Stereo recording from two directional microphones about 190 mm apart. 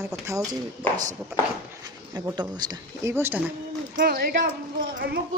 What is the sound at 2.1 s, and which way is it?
Speech, 20° right (ahead or behind).